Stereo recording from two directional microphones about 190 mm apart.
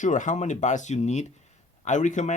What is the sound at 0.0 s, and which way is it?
Speech, 40° left (ahead or behind).